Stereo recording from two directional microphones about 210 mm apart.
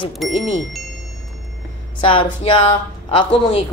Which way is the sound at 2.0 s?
25° left (ahead or behind).